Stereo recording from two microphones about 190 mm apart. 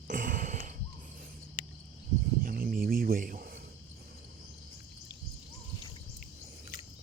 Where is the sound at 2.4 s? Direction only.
50° right (ahead or behind).